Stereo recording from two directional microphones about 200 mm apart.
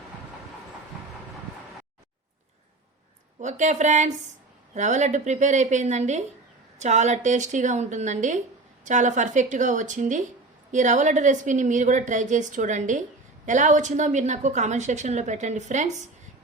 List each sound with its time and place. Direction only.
3.4 s a woman's voice: 35° right (ahead or behind)